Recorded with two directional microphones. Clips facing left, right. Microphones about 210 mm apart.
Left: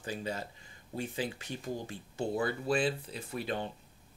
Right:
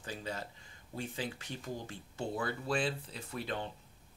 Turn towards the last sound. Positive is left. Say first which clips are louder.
# left 3 dB
turn(degrees=15)  # may be behind; listen again after turning